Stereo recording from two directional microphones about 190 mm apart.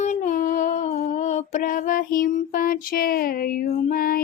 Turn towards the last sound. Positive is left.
turn(degrees=50)  # may be behind; listen again after turning